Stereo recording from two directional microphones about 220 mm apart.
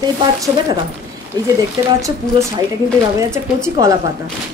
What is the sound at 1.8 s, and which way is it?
Speech, 15° right (ahead or behind).